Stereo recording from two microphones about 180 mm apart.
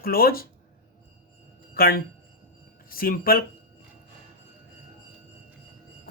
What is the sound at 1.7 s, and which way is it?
Speech, 55° left (ahead or behind).